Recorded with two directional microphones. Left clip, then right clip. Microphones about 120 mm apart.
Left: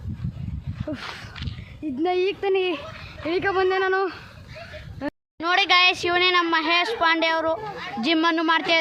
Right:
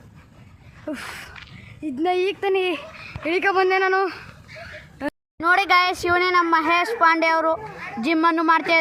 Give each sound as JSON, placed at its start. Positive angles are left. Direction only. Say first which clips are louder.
{"t": 0.9, "sound": "a woman's voice", "louder": "right 2 dB", "side_deg": -15}